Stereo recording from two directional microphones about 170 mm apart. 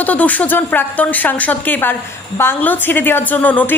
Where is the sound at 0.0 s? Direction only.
10° left (ahead or behind).